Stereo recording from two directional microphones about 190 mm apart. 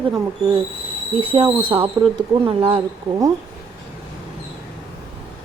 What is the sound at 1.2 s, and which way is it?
Speech, 25° right (ahead or behind).